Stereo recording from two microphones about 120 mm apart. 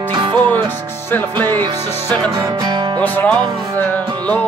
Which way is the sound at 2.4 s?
40° right (ahead or behind).